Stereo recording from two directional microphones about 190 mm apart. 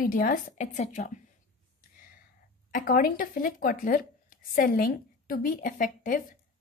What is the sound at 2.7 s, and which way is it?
A woman's voice, 50° left (ahead or behind).